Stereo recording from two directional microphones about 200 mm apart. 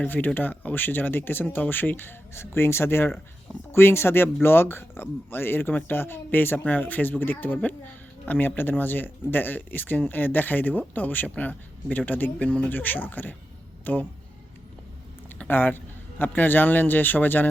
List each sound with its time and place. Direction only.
0.0 s speech: 10° left (ahead or behind)
15.4 s speech: 10° left (ahead or behind)